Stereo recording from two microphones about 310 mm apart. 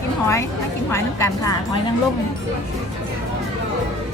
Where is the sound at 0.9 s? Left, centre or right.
Centre.